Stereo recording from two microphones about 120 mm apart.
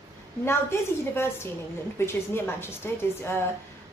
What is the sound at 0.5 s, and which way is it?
A woman's voice, 20° left (ahead or behind).